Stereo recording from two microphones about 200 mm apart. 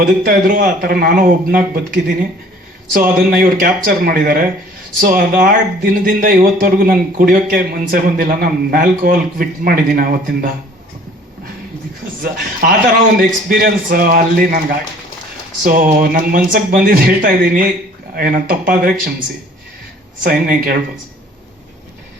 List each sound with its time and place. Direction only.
0.0 s speech: 45° right (ahead or behind)
3.2 s speech: 45° right (ahead or behind)
12.6 s speech: 45° right (ahead or behind)
20.2 s speech: 45° right (ahead or behind)